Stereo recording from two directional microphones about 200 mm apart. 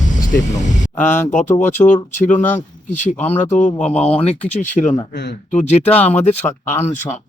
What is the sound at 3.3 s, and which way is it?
Speech, 10° left (ahead or behind).